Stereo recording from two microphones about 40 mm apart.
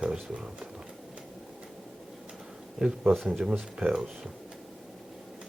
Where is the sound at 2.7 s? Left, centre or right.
Centre.